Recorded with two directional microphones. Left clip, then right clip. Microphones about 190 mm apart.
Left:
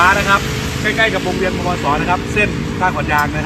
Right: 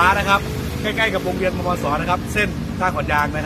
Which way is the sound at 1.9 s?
20° right (ahead or behind).